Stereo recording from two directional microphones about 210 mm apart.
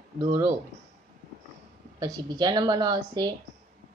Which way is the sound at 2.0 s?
20° right (ahead or behind).